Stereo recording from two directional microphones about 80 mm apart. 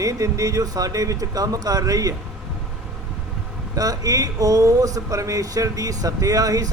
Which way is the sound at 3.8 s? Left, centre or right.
Right.